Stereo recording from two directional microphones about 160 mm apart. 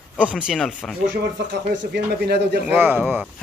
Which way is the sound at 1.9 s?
90° right.